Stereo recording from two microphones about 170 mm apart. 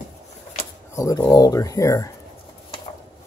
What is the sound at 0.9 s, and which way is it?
Speech, 20° left (ahead or behind).